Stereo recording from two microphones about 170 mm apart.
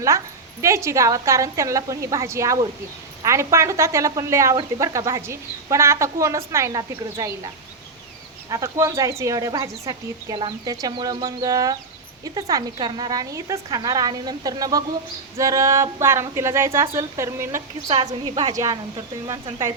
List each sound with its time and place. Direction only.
0.6 s a woman's voice: 15° right (ahead or behind)
8.4 s a woman's voice: 20° right (ahead or behind)